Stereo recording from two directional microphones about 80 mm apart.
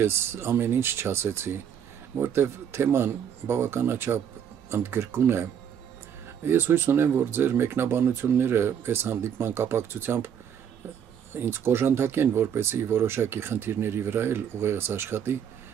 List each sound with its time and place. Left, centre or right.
0.0 s speech: right
11.3 s speech: right